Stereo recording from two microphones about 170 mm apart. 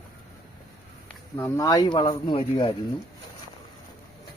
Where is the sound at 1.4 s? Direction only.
15° left (ahead or behind).